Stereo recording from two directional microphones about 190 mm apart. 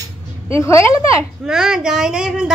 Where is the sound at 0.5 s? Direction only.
15° left (ahead or behind).